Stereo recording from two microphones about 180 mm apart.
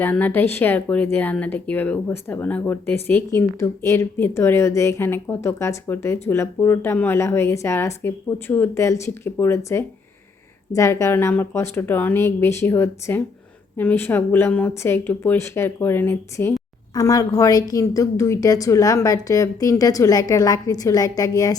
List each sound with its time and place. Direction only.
0.0 s speech: 10° left (ahead or behind)